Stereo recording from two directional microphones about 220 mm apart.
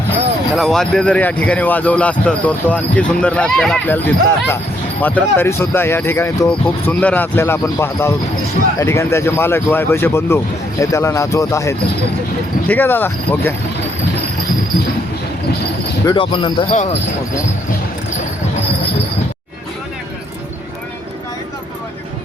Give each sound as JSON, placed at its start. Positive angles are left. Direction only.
{"t": 0.5, "sound": "speech", "side_deg": 0}
{"t": 16.0, "sound": "speech", "side_deg": 25}